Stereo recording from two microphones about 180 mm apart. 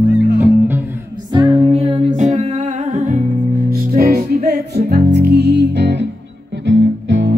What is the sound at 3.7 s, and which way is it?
Music, 55° right (ahead or behind).